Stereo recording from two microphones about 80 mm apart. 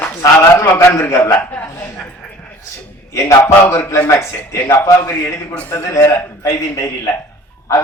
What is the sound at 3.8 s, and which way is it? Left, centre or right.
A man's voice, left.